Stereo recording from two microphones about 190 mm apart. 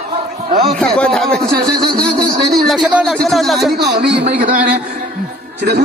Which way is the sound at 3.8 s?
55° right (ahead or behind).